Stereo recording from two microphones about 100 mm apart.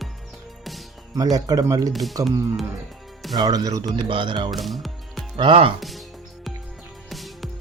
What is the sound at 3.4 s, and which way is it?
Speech, 40° right (ahead or behind).